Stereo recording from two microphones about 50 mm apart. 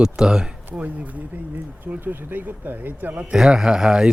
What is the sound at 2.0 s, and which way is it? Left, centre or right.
Speech, right.